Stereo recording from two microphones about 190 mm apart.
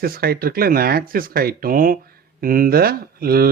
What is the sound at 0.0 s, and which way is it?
Speech, 50° right (ahead or behind).